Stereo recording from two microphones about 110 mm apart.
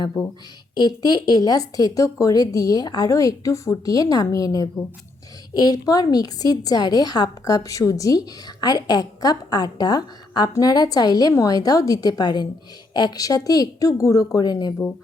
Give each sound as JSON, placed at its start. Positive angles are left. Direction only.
{"t": 0.7, "sound": "a woman's voice", "side_deg": 40}